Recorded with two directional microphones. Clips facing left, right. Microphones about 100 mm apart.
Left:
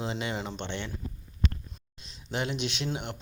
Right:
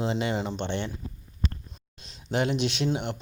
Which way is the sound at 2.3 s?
45° right (ahead or behind).